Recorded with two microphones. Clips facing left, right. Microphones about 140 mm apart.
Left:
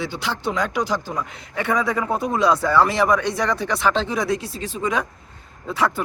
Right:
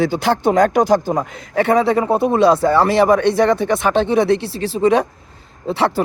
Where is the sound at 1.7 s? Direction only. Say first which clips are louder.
Right 6 dB; 30° right (ahead or behind).